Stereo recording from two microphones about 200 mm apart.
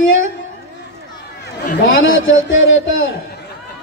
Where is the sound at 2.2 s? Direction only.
75° left (ahead or behind).